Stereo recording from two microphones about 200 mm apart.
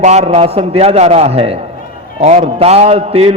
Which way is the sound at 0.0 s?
35° right (ahead or behind).